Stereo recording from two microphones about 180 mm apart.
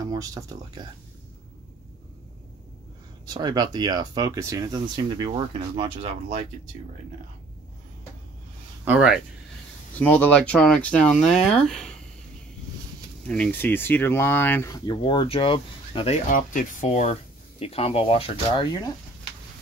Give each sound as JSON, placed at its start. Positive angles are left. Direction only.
{"t": 0.0, "sound": "speech", "side_deg": -20}
{"t": 3.3, "sound": "speech", "side_deg": -25}
{"t": 8.8, "sound": "speech", "side_deg": -5}
{"t": 9.9, "sound": "speech", "side_deg": 10}
{"t": 13.3, "sound": "speech", "side_deg": 10}
{"t": 14.9, "sound": "speech", "side_deg": 30}
{"t": 16.3, "sound": "speech", "side_deg": 45}